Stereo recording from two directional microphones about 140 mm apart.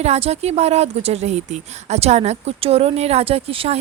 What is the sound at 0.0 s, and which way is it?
Speech, 50° right (ahead or behind).